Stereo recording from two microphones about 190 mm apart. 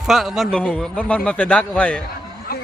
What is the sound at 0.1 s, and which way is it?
A man's voice, centre (ahead or behind).